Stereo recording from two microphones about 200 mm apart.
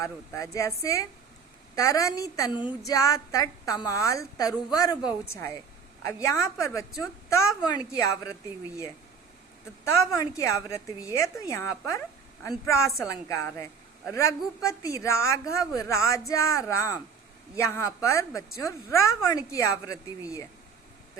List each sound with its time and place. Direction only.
0.0 s a woman's voice: 15° left (ahead or behind)
9.8 s a woman's voice: 15° left (ahead or behind)